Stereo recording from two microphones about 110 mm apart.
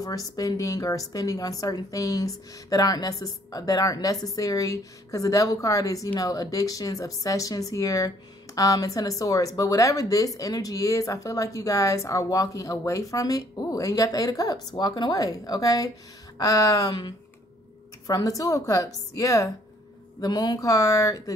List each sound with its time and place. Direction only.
0.0 s speech: 30° left (ahead or behind)